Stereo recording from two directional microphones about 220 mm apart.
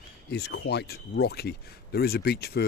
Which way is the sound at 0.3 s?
50° left (ahead or behind).